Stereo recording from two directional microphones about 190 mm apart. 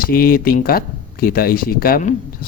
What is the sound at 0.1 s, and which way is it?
Speech, 50° left (ahead or behind).